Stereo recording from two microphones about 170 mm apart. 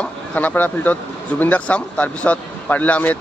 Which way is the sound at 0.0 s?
10° left (ahead or behind).